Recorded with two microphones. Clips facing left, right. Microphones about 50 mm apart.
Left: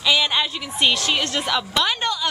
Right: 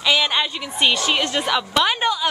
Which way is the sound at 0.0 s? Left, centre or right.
Centre.